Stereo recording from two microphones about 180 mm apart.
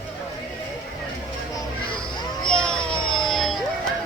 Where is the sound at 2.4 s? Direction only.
5° left (ahead or behind).